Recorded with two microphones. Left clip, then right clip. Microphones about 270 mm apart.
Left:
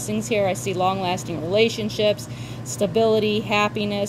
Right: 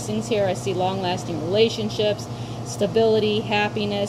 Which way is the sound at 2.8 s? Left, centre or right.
Left.